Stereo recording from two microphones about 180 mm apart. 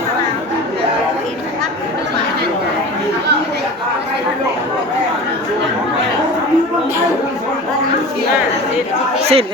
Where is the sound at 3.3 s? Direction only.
70° right (ahead or behind).